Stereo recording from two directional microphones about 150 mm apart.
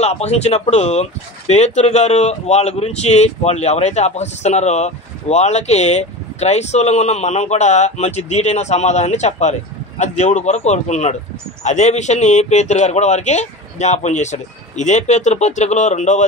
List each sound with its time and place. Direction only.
0.0 s speech: 45° left (ahead or behind)